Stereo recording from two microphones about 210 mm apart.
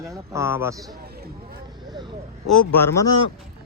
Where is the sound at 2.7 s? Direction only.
15° left (ahead or behind).